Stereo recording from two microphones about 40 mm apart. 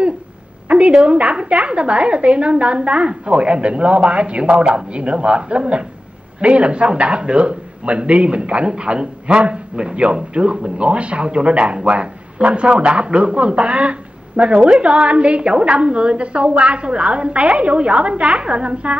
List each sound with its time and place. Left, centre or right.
0.7 s a woman's voice: right